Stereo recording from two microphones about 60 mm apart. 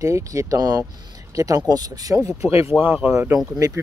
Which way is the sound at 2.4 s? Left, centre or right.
Right.